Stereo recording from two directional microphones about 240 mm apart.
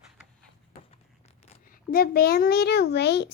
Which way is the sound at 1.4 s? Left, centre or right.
Left.